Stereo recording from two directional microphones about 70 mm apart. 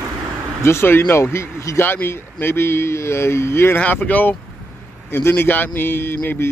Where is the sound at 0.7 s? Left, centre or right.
Left.